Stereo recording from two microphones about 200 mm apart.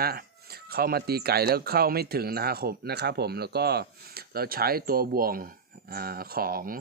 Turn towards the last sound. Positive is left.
turn(degrees=-45)  # may be behind; listen again after turning